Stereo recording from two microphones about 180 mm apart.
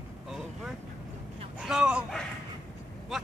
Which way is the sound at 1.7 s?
5° right (ahead or behind).